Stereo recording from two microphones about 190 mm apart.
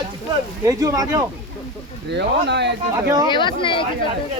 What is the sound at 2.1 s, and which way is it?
Speech, 65° right (ahead or behind).